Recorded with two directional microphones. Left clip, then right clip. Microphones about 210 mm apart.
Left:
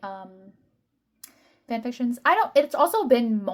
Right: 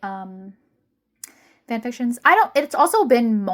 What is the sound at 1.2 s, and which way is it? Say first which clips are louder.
Speech: right 7 dB; 35° right (ahead or behind).